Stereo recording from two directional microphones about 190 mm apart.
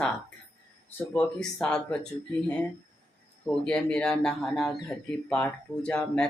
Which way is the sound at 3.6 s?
5° left (ahead or behind).